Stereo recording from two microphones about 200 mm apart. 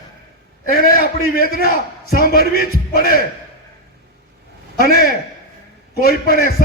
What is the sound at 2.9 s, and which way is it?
Speech, 45° left (ahead or behind).